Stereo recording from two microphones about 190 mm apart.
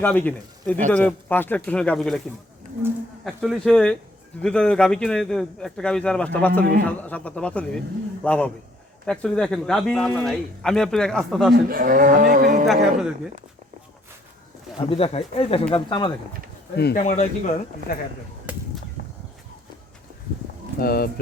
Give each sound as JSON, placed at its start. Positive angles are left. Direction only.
{"t": 0.0, "sound": "speech", "side_deg": 10}
{"t": 3.2, "sound": "a man's voice", "side_deg": 0}
{"t": 11.5, "sound": "cattle", "side_deg": -50}
{"t": 12.6, "sound": "a man's voice", "side_deg": 0}
{"t": 14.8, "sound": "speech", "side_deg": 30}
{"t": 16.7, "sound": "speech", "side_deg": 60}
{"t": 17.0, "sound": "speech", "side_deg": 40}
{"t": 18.5, "sound": "a sound", "side_deg": -10}
{"t": 20.7, "sound": "speech", "side_deg": 55}